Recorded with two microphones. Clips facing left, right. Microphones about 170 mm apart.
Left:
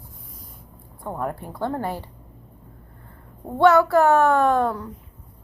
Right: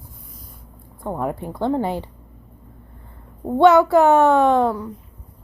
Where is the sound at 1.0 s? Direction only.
15° right (ahead or behind).